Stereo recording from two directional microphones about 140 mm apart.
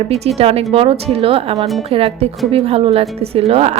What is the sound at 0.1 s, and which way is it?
A woman's voice, 45° right (ahead or behind).